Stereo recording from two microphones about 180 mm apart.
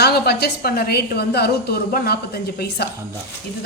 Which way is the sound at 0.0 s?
60° left (ahead or behind).